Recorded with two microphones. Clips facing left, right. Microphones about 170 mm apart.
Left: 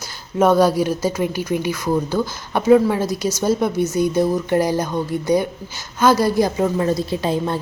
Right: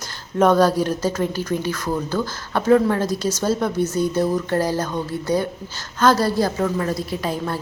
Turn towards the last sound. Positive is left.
turn(degrees=25)  # may be behind; listen again after turning